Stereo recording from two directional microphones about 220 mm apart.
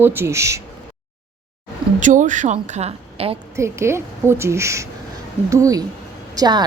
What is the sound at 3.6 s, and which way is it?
A woman's voice, 10° right (ahead or behind).